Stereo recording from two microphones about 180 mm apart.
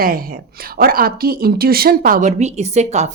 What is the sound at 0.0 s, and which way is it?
Speech, 55° right (ahead or behind).